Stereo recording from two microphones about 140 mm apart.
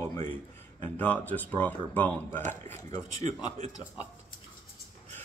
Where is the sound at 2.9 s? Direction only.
30° left (ahead or behind).